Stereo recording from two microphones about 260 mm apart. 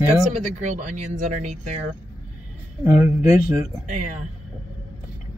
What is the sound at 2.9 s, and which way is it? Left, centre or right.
Speech, centre.